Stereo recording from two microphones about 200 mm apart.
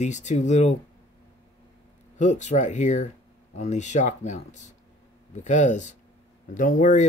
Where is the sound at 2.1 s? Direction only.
35° left (ahead or behind).